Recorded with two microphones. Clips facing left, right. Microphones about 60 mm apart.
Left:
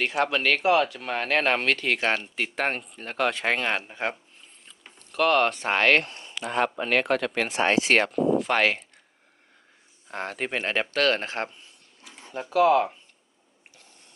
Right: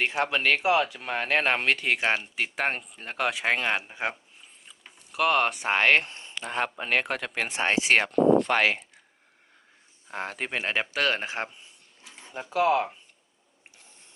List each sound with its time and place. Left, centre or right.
0.0 s speech: right
6.7 s speech: centre
10.1 s speech: centre